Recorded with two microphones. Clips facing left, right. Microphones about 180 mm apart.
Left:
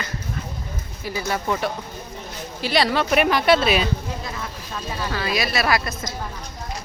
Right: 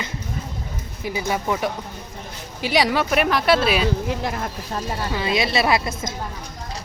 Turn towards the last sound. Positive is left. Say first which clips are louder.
# right 2 dB
turn(degrees=-25)  # may be behind; listen again after turning